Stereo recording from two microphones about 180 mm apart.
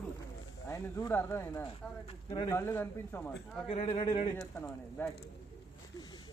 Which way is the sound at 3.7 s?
30° left (ahead or behind).